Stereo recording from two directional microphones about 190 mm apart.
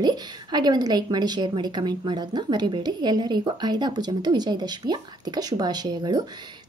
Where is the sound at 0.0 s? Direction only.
20° right (ahead or behind).